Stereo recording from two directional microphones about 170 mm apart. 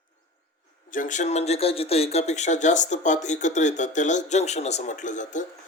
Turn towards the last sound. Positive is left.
turn(degrees=45)  # may be behind; listen again after turning